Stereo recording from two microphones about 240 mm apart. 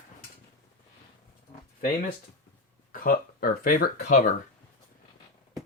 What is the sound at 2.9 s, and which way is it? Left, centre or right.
Speech, left.